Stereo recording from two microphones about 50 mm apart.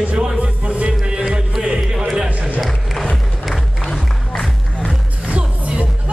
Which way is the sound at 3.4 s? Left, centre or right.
Centre.